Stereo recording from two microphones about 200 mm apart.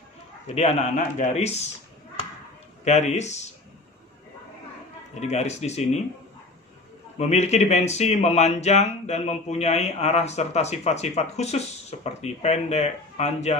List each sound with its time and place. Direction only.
0.6 s speech: 35° left (ahead or behind)
2.8 s speech: 35° left (ahead or behind)
5.2 s speech: 35° left (ahead or behind)
7.2 s speech: 35° left (ahead or behind)